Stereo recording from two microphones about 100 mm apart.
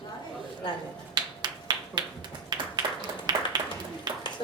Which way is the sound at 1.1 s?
45° right (ahead or behind).